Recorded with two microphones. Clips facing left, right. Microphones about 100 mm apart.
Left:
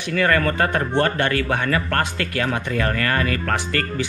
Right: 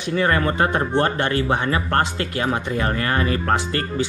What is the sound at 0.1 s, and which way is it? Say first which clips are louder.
Speech: even; 20° right (ahead or behind).